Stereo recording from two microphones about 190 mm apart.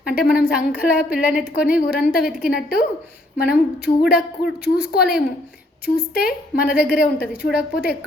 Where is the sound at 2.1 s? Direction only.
5° right (ahead or behind).